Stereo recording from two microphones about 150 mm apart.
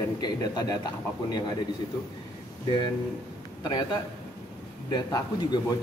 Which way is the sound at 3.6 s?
25° left (ahead or behind).